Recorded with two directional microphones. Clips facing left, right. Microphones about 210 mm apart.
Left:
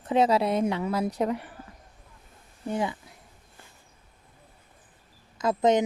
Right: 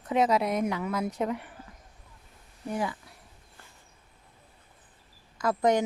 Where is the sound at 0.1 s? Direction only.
30° left (ahead or behind).